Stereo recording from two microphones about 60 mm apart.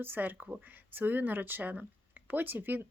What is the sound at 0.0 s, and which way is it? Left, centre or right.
Speech, right.